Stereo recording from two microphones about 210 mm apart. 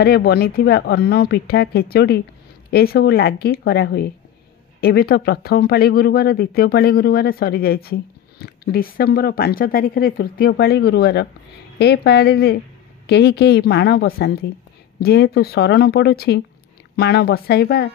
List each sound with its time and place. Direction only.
0.0 s speech: 50° left (ahead or behind)